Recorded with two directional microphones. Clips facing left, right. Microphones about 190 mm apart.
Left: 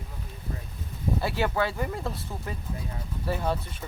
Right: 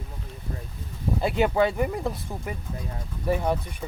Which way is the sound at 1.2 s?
20° right (ahead or behind).